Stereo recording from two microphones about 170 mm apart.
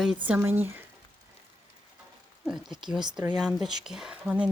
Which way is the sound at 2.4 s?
5° right (ahead or behind).